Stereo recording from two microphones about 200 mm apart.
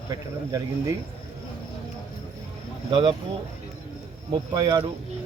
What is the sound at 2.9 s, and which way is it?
Speech, 25° right (ahead or behind).